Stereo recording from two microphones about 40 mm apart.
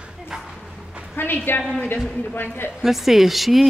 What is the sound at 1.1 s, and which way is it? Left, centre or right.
A woman's voice, left.